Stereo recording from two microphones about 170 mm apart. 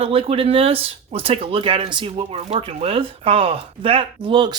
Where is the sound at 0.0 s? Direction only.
35° right (ahead or behind).